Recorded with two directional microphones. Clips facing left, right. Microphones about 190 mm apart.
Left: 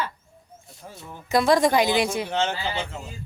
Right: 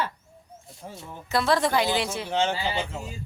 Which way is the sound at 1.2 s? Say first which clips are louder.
Left 4 dB; 15° left (ahead or behind).